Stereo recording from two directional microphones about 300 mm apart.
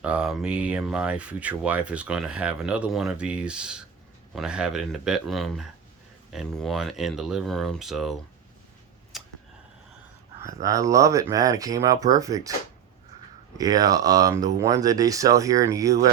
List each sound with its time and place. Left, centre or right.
0.0 s speech: centre
9.1 s a sound: centre
10.4 s speech: centre
13.6 s speech: centre